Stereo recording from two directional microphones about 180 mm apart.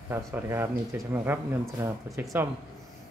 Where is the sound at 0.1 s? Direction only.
15° right (ahead or behind).